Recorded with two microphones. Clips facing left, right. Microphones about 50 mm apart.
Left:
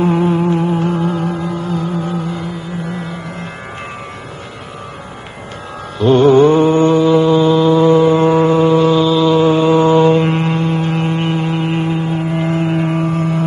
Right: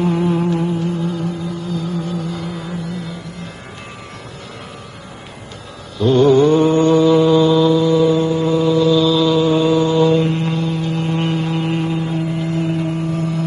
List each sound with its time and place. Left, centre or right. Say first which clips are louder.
0.0 s a sound: left 3 dB; left
0.7 s music: left 4 dB; left
5.9 s mantra: left 3 dB; left; by 7.4 s centre
7.4 s mantra: left 3 dB; left
9.0 s mantra: left 3 dB; left
11.1 s vehicle: left 2 dB; left